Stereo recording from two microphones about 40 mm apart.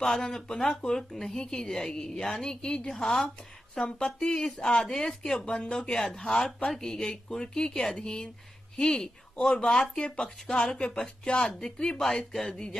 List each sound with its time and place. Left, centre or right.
0.0 s speech: centre
2.9 s speech: centre
3.8 s speech: left
5.5 s speech: left
5.9 s speech: centre